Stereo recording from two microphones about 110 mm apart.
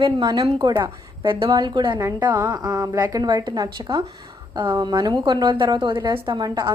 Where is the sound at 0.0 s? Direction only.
40° right (ahead or behind).